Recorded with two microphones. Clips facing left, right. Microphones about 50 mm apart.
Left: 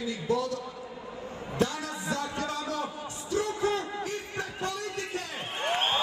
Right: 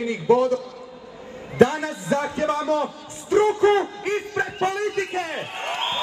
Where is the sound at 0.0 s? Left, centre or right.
Right.